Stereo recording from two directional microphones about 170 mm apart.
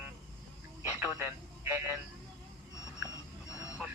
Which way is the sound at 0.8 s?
10° right (ahead or behind).